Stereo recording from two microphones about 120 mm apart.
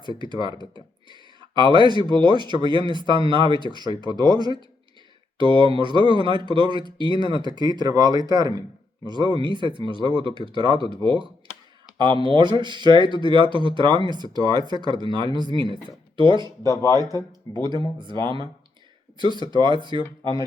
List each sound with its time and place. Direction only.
0.2 s speech: 40° right (ahead or behind)
1.1 s a sound: 40° right (ahead or behind)
1.9 s speech: 40° right (ahead or behind)
16.6 s speech: 25° left (ahead or behind)
17.6 s speech: 40° right (ahead or behind)